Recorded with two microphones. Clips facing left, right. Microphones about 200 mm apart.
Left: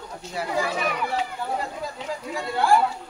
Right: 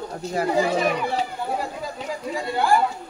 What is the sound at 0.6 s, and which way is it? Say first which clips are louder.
Speech: right 5 dB; 25° right (ahead or behind).